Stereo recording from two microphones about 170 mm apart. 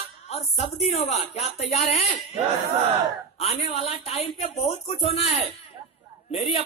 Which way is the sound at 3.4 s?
40° left (ahead or behind).